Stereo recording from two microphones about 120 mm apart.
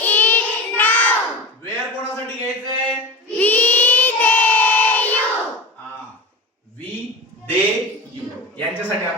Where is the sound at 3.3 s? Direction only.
15° left (ahead or behind).